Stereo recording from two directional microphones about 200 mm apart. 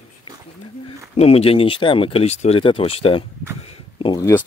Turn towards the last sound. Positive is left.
turn(degrees=20)  # may be behind; listen again after turning